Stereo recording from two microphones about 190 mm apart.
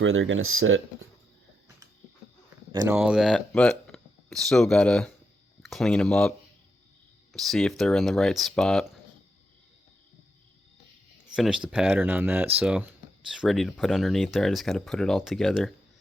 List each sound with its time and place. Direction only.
0.0 s speech: 90° right
2.9 s speech: 5° right (ahead or behind)
7.3 s speech: centre (ahead or behind)
11.3 s speech: 5° right (ahead or behind)